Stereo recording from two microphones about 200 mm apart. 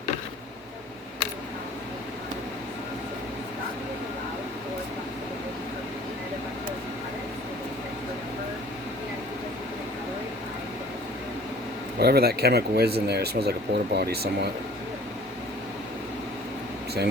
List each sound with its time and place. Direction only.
11.9 s speech: 50° right (ahead or behind)